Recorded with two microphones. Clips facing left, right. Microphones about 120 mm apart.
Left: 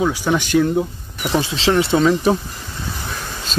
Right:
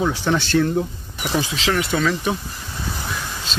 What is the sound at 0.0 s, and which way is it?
Speech, 10° left (ahead or behind).